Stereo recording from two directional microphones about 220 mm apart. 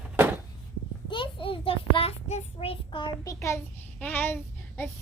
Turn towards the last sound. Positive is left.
turn(degrees=10)  # may be behind; listen again after turning